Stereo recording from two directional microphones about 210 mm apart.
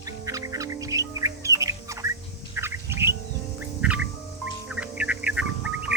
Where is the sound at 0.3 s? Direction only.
15° right (ahead or behind).